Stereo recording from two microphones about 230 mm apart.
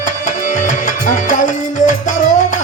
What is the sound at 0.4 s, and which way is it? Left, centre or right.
Music, left.